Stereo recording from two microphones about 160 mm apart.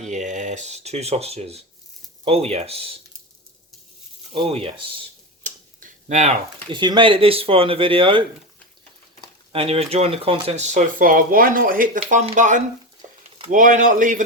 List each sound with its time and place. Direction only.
0.1 s speech: 50° right (ahead or behind)
4.4 s speech: 35° right (ahead or behind)
5.4 s tick-tock: 50° right (ahead or behind)
6.7 s speech: 30° right (ahead or behind)
9.5 s speech: 35° right (ahead or behind); by 14.2 s 55° right (ahead or behind)